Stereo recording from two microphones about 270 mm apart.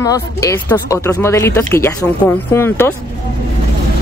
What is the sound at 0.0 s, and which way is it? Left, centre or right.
Speech, centre.